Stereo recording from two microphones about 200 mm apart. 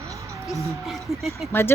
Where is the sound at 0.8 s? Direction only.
Centre (ahead or behind).